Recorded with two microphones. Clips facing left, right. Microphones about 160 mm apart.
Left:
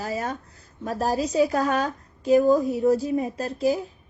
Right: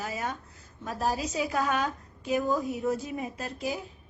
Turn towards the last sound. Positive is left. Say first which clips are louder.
# left 10 dB
turn(degrees=35)  # may be behind; listen again after turning